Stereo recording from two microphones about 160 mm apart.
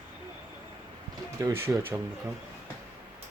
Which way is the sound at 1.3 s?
20° right (ahead or behind).